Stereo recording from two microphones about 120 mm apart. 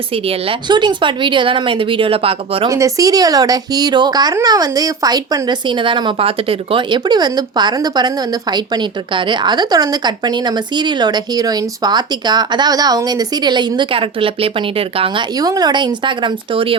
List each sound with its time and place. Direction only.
0.1 s speech: 50° right (ahead or behind)
0.7 s speech: 40° right (ahead or behind)
2.6 s speech: 30° right (ahead or behind); by 15.2 s 50° right (ahead or behind)
15.4 s speech: 35° right (ahead or behind)